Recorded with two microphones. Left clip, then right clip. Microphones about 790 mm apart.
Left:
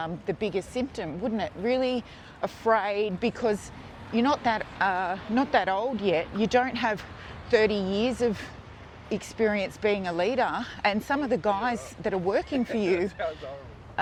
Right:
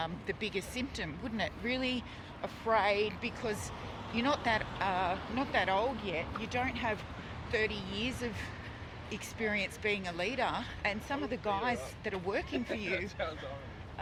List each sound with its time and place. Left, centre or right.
0.0 s speech: left